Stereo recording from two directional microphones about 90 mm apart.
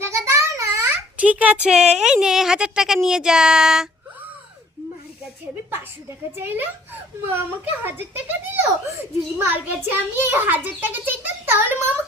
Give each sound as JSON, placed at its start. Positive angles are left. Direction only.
{"t": 0.0, "sound": "a sound", "side_deg": -30}
{"t": 1.1, "sound": "speech", "side_deg": -15}
{"t": 6.3, "sound": "a child's voice", "side_deg": -25}